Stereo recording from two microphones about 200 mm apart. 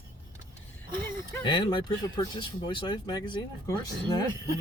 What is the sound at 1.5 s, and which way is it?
Speech, 25° left (ahead or behind).